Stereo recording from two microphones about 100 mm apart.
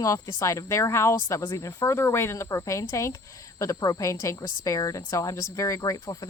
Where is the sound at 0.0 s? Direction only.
30° left (ahead or behind).